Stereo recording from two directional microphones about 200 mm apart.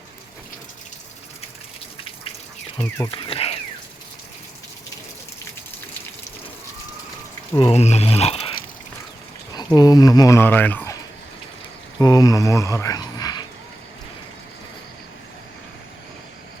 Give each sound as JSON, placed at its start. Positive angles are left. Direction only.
{"t": 3.0, "sound": "speech", "side_deg": 25}
{"t": 7.5, "sound": "speech", "side_deg": 25}
{"t": 9.7, "sound": "speech", "side_deg": 20}
{"t": 11.9, "sound": "speech", "side_deg": 20}